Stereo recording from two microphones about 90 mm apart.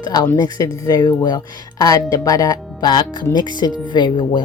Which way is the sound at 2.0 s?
40° left (ahead or behind).